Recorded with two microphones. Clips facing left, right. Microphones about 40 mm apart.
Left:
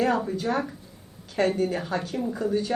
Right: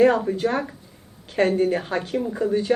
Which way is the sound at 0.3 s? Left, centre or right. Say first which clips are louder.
Right 3 dB; right.